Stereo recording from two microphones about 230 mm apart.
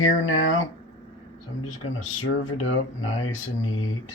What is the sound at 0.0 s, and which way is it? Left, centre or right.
Speech, left.